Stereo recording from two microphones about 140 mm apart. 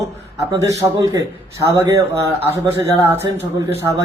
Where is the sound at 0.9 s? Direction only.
25° right (ahead or behind).